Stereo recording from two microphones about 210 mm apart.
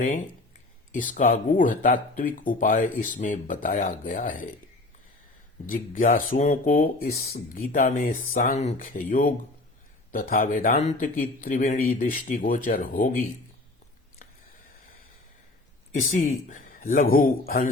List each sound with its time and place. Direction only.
0.9 s speech: 40° left (ahead or behind)
5.6 s speech: 40° left (ahead or behind)
15.9 s speech: 35° left (ahead or behind)